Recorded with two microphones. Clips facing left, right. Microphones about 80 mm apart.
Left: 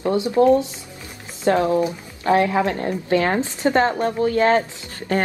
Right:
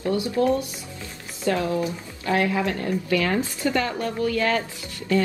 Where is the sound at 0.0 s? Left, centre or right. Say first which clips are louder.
Left 5 dB; left.